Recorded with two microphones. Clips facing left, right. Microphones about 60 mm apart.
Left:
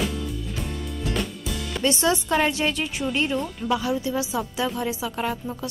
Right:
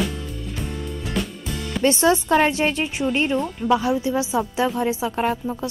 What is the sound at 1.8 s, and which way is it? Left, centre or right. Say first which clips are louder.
Speech: right 5 dB; right.